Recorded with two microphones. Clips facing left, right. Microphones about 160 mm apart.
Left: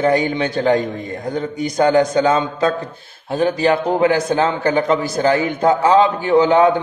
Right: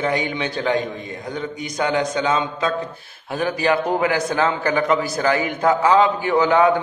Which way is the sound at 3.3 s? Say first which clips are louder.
Left 4 dB; 25° left (ahead or behind).